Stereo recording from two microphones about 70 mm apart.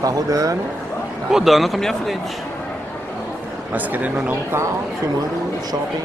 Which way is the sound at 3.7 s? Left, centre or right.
Right.